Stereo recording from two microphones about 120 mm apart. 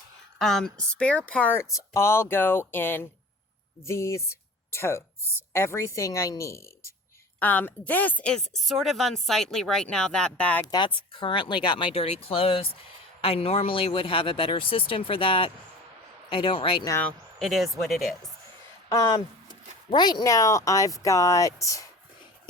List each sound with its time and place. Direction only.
0.3 s speech: 5° left (ahead or behind)
1.7 s speech: 25° left (ahead or behind)
7.3 s a woman's voice: 15° left (ahead or behind)
10.7 s speech: 40° left (ahead or behind)
17.4 s a woman's voice: centre (ahead or behind)
18.9 s speech: 25° left (ahead or behind)